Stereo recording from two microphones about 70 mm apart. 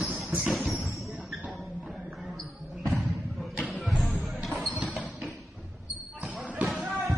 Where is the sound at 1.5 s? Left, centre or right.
Centre.